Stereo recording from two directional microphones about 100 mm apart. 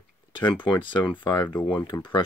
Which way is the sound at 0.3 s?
55° left (ahead or behind).